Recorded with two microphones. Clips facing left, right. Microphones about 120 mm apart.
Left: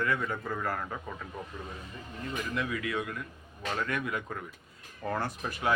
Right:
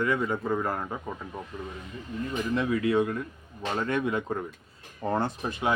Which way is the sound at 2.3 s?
30° right (ahead or behind).